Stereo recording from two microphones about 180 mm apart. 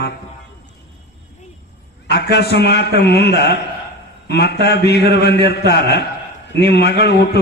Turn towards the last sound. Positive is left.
turn(degrees=70)  # may be behind; listen again after turning